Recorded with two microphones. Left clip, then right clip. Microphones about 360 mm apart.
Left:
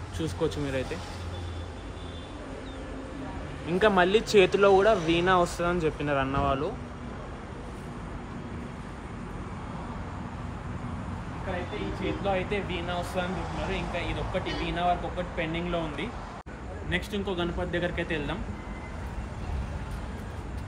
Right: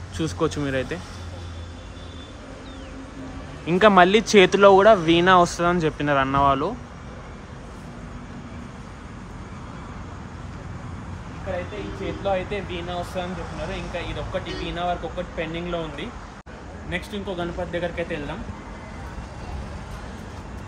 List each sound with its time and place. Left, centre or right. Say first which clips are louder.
0.2 s speech: right 5 dB; centre
3.6 s speech: right 8 dB; right
12.2 s speech: right 5 dB; centre